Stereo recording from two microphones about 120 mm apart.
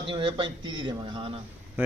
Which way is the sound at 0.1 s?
45° right (ahead or behind).